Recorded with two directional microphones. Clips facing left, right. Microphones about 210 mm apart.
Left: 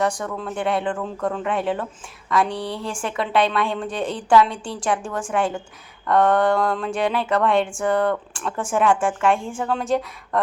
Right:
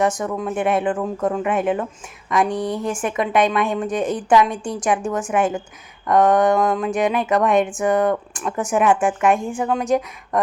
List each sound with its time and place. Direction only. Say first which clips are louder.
0.0 s a woman's voice: right 3 dB; 20° right (ahead or behind)